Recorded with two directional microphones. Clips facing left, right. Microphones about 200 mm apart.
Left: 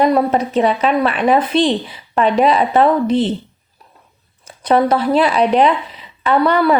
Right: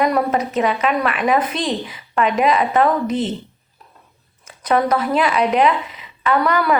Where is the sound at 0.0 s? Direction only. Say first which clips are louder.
Left 4 dB; 25° left (ahead or behind).